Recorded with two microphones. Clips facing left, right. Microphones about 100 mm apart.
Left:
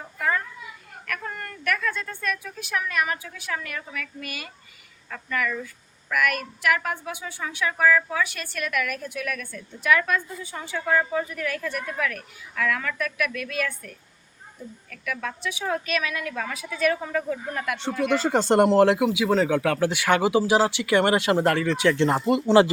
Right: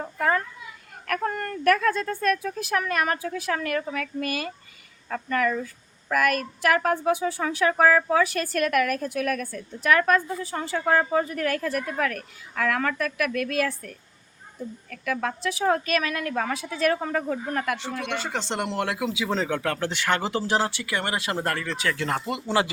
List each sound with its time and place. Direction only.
0.0 s a sound: 45° right (ahead or behind)
1.2 s a woman's voice: 40° right (ahead or behind)
17.7 s speech: 30° left (ahead or behind)
18.9 s speech: 15° left (ahead or behind)